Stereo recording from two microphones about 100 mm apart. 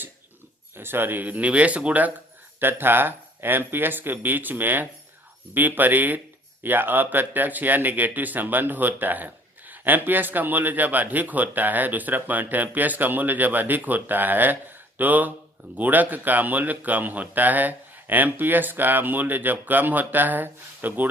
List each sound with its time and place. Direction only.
0.8 s speech: 20° right (ahead or behind)